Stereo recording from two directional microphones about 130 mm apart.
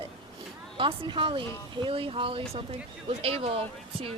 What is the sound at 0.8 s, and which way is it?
Speech, 40° right (ahead or behind).